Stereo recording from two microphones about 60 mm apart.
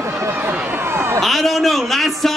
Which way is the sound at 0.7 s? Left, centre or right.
Right.